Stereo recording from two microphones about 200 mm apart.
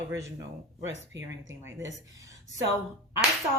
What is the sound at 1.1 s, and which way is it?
Speech, 70° right (ahead or behind).